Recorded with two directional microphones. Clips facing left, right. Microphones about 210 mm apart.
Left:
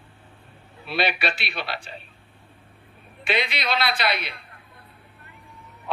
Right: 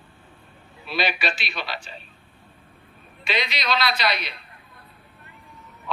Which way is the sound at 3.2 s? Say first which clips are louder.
Left 2 dB; 55° left (ahead or behind).